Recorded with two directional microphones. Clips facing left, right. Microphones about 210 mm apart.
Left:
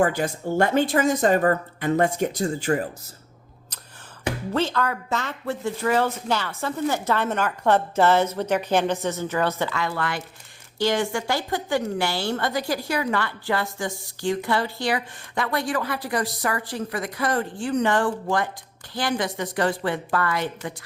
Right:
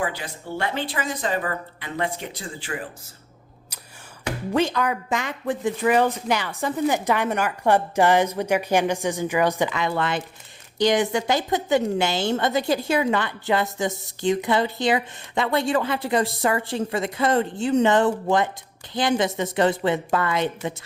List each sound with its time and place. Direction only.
0.0 s speech: 45° left (ahead or behind)
4.5 s a woman's voice: 15° right (ahead or behind)